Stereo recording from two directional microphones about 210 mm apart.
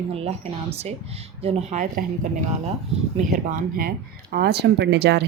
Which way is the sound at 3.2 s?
40° right (ahead or behind).